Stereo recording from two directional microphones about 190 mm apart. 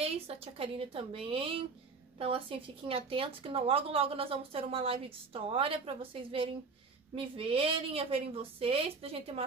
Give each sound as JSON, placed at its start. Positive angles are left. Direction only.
{"t": 0.0, "sound": "speech", "side_deg": -30}